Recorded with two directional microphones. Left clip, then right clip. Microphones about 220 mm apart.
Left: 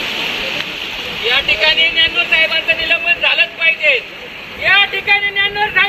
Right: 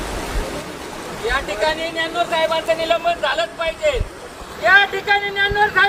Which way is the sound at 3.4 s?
55° right (ahead or behind).